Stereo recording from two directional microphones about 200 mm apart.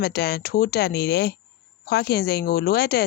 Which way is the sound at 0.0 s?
50° left (ahead or behind).